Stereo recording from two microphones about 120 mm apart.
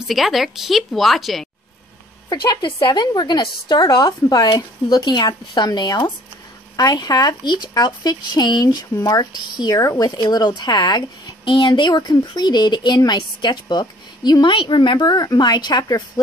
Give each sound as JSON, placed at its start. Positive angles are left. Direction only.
{"t": 0.0, "sound": "speech", "side_deg": 0}
{"t": 2.2, "sound": "speech", "side_deg": 40}
{"t": 15.0, "sound": "speech", "side_deg": 30}